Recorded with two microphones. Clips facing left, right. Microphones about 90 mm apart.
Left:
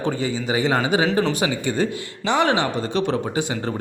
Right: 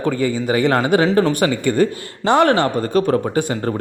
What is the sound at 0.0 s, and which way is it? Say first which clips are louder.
A man's voice: right 5 dB; 50° right (ahead or behind).